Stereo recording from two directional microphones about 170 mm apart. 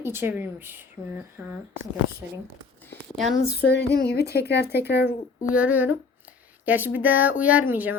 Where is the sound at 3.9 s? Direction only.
70° left (ahead or behind).